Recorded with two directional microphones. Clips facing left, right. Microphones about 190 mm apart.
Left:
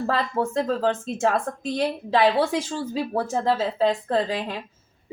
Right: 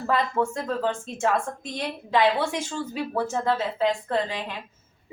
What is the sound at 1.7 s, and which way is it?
A woman's voice, 35° left (ahead or behind).